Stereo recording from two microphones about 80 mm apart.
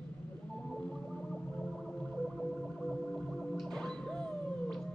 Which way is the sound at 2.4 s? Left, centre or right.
Centre.